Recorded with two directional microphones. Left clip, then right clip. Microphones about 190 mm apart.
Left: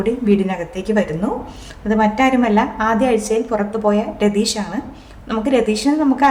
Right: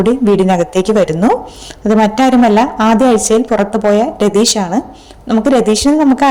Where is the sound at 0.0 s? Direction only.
40° right (ahead or behind).